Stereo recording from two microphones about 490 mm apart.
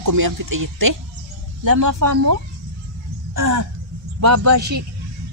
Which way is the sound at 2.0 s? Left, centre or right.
Right.